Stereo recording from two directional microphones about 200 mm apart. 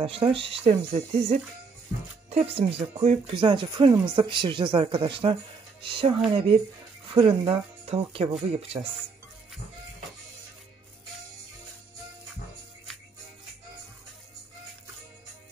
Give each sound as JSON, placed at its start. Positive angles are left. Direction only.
{"t": 0.0, "sound": "speech", "side_deg": -25}
{"t": 7.2, "sound": "speech", "side_deg": -30}